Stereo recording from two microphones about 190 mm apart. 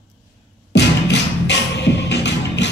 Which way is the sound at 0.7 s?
65° left (ahead or behind).